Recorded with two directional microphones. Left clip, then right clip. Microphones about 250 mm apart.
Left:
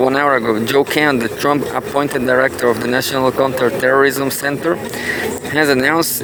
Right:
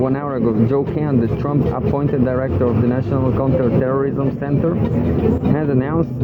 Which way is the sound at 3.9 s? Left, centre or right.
Left.